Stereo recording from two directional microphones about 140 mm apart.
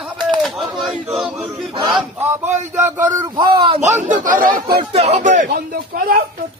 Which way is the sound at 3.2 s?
35° right (ahead or behind).